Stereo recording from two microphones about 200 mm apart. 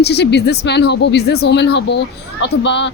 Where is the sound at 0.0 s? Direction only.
55° left (ahead or behind).